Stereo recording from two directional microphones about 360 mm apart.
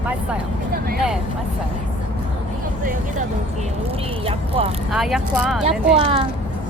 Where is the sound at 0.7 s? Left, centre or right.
Right.